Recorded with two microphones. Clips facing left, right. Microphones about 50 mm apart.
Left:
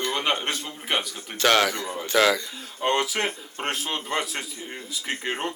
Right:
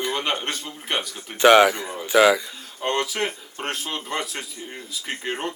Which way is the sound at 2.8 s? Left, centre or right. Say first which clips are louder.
Even; centre.